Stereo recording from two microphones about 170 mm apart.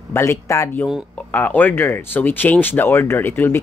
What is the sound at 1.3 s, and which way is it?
Speech, 10° left (ahead or behind).